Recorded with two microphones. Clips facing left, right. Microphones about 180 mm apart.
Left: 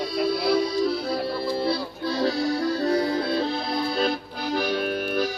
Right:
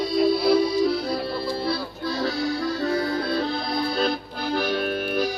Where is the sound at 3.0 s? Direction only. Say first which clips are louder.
Left 1 dB; 20° left (ahead or behind).